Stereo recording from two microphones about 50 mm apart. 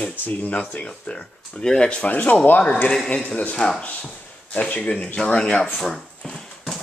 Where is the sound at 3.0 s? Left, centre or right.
Centre.